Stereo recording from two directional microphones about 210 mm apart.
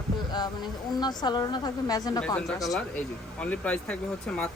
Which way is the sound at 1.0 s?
20° left (ahead or behind).